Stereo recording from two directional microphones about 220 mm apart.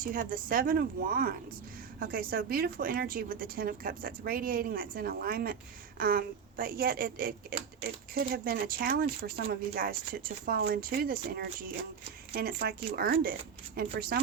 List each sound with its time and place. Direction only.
0.0 s a woman's voice: 40° right (ahead or behind)